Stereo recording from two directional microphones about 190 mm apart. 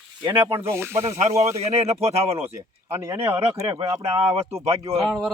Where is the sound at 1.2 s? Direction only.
35° right (ahead or behind).